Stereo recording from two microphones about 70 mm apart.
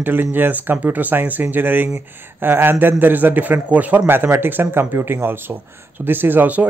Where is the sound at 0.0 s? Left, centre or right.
Right.